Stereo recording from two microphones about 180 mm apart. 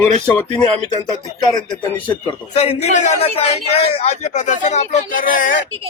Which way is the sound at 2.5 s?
35° left (ahead or behind).